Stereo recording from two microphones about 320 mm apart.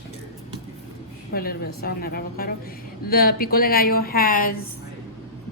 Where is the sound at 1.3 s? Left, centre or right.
Left.